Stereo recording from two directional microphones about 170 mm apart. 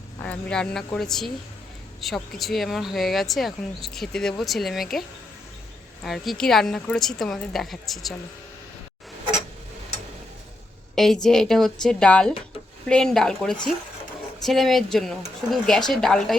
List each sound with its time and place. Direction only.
0.2 s speech: 10° left (ahead or behind)
10.9 s speech: centre (ahead or behind)